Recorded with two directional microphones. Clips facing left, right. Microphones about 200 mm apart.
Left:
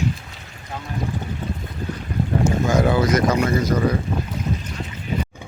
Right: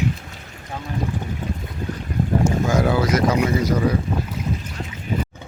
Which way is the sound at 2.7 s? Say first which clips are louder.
Left 2 dB; 5° right (ahead or behind).